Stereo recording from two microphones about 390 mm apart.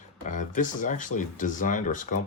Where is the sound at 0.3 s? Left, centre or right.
Centre.